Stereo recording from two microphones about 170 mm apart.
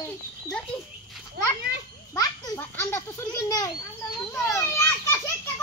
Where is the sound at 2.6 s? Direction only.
15° left (ahead or behind).